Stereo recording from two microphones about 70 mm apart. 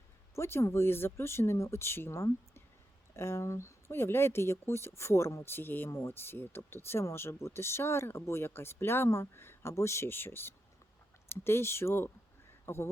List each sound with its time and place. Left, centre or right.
0.3 s a man's voice: left